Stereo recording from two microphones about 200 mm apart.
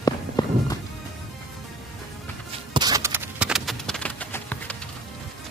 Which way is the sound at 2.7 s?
20° right (ahead or behind).